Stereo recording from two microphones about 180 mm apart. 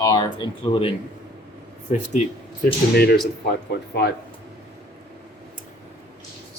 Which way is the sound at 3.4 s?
65° left (ahead or behind).